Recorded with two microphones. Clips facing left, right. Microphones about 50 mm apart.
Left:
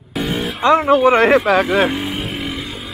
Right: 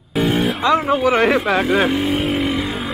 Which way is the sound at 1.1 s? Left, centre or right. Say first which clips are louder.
Left 2 dB; left.